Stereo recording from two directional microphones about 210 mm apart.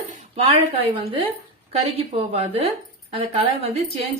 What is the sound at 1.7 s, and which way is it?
A woman's voice, 30° right (ahead or behind).